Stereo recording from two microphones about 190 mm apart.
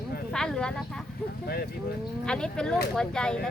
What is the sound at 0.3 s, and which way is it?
Speech, 5° left (ahead or behind).